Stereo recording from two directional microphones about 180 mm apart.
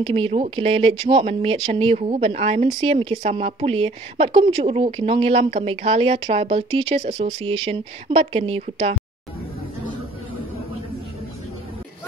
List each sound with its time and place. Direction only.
0.0 s speech: 30° right (ahead or behind)